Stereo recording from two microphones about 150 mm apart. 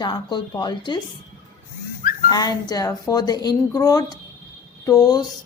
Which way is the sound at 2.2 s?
25° left (ahead or behind).